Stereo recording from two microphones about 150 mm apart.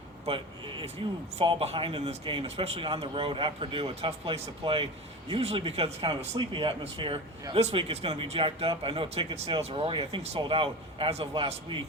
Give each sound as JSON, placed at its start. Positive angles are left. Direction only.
{"t": 0.3, "sound": "speech", "side_deg": -35}